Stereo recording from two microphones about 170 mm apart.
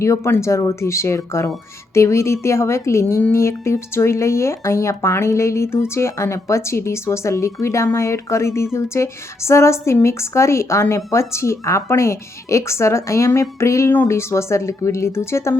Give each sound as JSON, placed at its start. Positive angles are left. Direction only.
{"t": 0.0, "sound": "a woman's voice", "side_deg": 15}